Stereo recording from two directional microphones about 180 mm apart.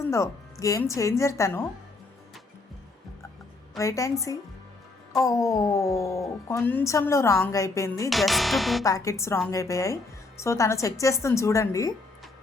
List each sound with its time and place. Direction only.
0.0 s music: 15° left (ahead or behind)
0.6 s a woman's voice: 15° left (ahead or behind)
3.8 s a woman's voice: 15° left (ahead or behind)
8.1 s speech: centre (ahead or behind)
8.8 s a woman's voice: 20° left (ahead or behind)